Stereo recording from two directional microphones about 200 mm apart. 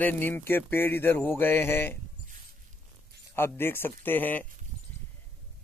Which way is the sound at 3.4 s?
10° left (ahead or behind).